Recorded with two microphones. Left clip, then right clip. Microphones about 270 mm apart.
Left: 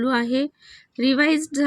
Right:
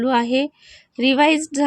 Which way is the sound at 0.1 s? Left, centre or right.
Centre.